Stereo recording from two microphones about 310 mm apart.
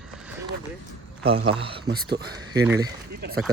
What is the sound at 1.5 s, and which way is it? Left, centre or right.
Speech, centre.